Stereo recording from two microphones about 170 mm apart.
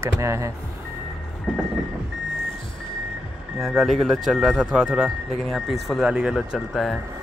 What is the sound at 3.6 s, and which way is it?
Speech, centre (ahead or behind).